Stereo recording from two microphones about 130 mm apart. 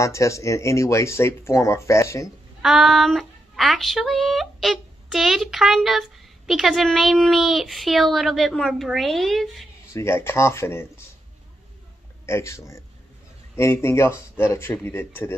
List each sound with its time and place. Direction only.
0.0 s speech: 25° left (ahead or behind)
2.6 s speech: centre (ahead or behind)
9.9 s speech: 20° left (ahead or behind)
12.3 s speech: 20° left (ahead or behind)